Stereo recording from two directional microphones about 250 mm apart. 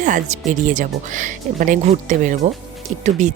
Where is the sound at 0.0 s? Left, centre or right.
Right.